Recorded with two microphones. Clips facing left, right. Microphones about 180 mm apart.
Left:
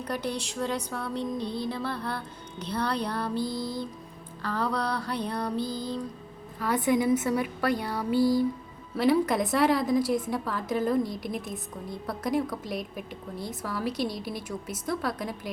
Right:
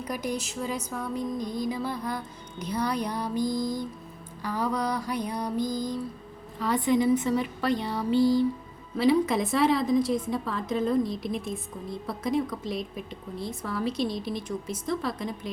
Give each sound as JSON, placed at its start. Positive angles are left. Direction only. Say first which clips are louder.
{"t": 0.0, "sound": "speech", "louder": "even", "side_deg": -10}
{"t": 6.6, "sound": "speech", "louder": "right 1 dB", "side_deg": 5}